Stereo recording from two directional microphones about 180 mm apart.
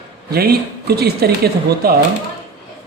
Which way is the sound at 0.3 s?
60° right (ahead or behind).